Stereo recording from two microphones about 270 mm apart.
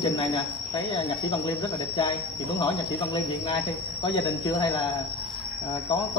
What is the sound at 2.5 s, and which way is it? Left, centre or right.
Speech, centre.